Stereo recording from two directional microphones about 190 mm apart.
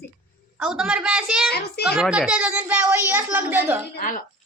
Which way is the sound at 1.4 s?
55° left (ahead or behind).